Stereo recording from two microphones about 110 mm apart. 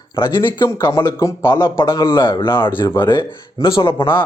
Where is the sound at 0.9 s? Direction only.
25° left (ahead or behind).